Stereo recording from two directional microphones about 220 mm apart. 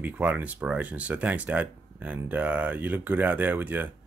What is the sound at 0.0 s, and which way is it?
Speech, 5° right (ahead or behind).